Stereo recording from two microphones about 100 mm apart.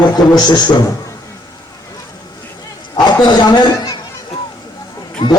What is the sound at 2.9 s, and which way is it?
A man's voice, 45° left (ahead or behind).